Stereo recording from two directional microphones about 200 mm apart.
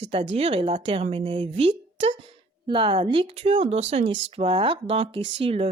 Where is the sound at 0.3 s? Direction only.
30° right (ahead or behind).